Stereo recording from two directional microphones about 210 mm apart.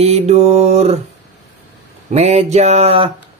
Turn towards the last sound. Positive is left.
turn(degrees=-30)  # may be behind; listen again after turning